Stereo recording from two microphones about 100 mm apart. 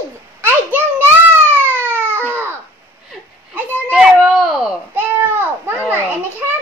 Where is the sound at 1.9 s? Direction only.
20° right (ahead or behind).